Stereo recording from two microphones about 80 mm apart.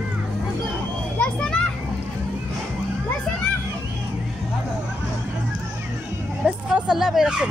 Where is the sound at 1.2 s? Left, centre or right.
Centre.